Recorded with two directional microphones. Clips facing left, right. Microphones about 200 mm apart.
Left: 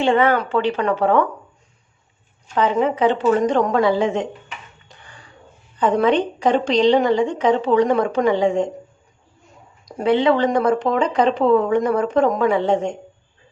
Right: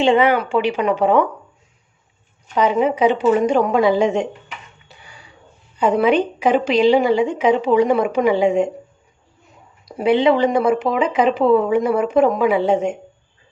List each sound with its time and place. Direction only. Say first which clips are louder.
0.0 s speech: right 2 dB; 15° right (ahead or behind)
2.6 s speech: right 2 dB; 15° right (ahead or behind)
4.9 s music: even; 10° right (ahead or behind)
5.7 s speech: right 1 dB; 10° right (ahead or behind)
9.8 s speech: right 2 dB; 10° right (ahead or behind)